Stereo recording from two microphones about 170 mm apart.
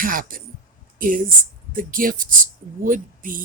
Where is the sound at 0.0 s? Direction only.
55° right (ahead or behind).